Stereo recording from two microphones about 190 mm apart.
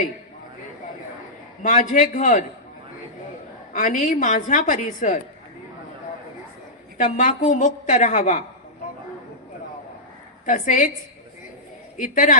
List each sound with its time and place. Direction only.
1.6 s a woman's voice: 45° left (ahead or behind)
3.7 s a woman's voice: 45° left (ahead or behind)
7.0 s a woman's voice: 40° left (ahead or behind)
10.4 s a woman's voice: 40° left (ahead or behind)
11.9 s a woman's voice: 45° left (ahead or behind)